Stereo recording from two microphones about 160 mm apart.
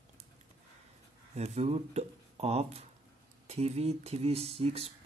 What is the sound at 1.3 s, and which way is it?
Speech, 40° right (ahead or behind).